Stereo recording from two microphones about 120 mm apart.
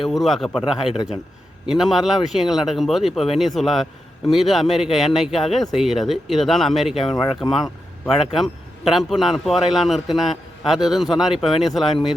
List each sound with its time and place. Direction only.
0.0 s a man's voice: centre (ahead or behind)
1.6 s a man's voice: 5° right (ahead or behind)